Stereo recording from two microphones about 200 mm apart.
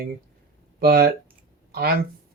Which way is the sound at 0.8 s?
50° right (ahead or behind).